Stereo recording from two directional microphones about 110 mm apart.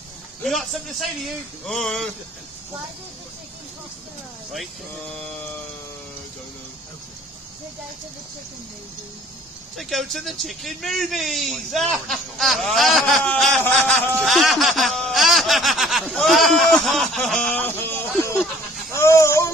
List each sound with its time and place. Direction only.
0.4 s a man's voice: centre (ahead or behind)
9.8 s a man's voice: centre (ahead or behind)
14.2 s snicker: centre (ahead or behind); by 18.3 s 20° left (ahead or behind)
18.9 s a sound: 25° left (ahead or behind)